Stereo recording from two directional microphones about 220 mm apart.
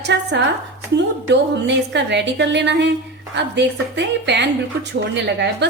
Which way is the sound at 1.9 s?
50° right (ahead or behind).